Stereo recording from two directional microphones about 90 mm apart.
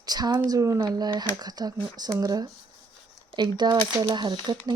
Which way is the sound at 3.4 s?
50° right (ahead or behind).